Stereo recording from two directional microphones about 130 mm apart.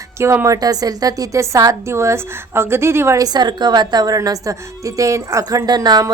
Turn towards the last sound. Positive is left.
turn(degrees=-30)  # may be behind; listen again after turning